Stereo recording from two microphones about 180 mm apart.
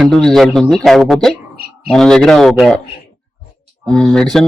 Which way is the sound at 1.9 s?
5° left (ahead or behind).